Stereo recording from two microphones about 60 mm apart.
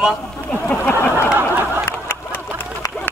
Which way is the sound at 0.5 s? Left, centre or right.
Left.